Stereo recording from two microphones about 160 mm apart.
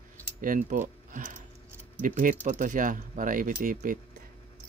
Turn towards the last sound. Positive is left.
turn(degrees=-55)  # may be behind; listen again after turning